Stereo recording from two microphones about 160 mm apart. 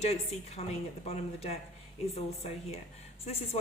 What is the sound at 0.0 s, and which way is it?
A woman's voice, 45° left (ahead or behind).